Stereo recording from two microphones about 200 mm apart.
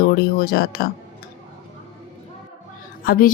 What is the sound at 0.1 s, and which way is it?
Speech, 50° left (ahead or behind).